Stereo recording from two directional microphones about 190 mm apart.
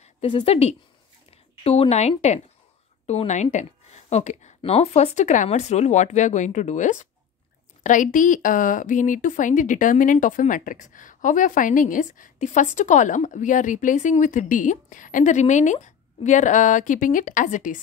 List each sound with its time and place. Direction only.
0.0 s a woman's voice: 30° left (ahead or behind)